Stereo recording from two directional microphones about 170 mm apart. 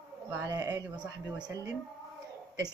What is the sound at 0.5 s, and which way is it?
Speech, 20° right (ahead or behind).